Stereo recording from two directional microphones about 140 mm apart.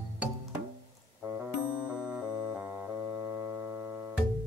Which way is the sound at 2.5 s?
15° right (ahead or behind).